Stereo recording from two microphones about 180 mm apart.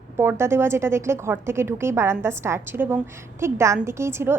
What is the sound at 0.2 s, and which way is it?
A woman's voice, 15° right (ahead or behind).